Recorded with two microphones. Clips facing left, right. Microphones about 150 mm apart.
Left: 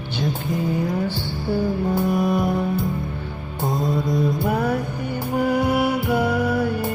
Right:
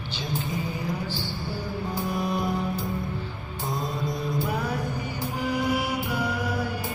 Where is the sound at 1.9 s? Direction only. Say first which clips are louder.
Left 6 dB; 55° left (ahead or behind).